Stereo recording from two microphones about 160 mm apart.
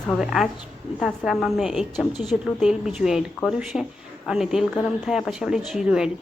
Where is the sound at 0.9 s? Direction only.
Centre (ahead or behind).